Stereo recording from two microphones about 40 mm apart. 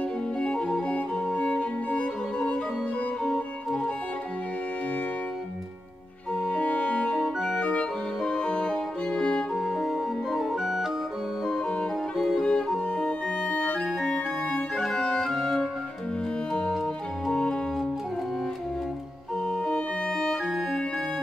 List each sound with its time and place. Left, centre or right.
0.4 s music: left
6.6 s music: left
7.2 s organ: centre
8.2 s music: left
9.6 s organ: centre
12.4 s music: centre
13.5 s music: left
14.0 s organ: centre
16.8 s music: centre
19.6 s music: left